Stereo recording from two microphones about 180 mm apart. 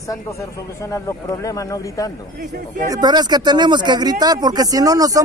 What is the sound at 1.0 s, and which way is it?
Speech, 20° left (ahead or behind).